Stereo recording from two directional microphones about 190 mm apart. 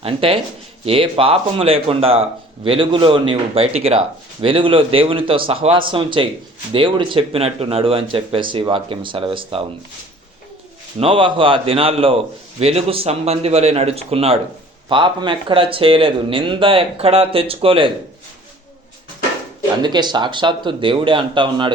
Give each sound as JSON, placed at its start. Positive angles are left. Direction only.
{"t": 0.0, "sound": "a man's voice", "side_deg": -30}
{"t": 11.0, "sound": "a man's voice", "side_deg": -25}
{"t": 19.8, "sound": "a man's voice", "side_deg": -20}